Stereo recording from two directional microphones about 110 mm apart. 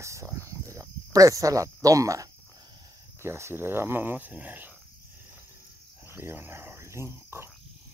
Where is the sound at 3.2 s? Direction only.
25° right (ahead or behind).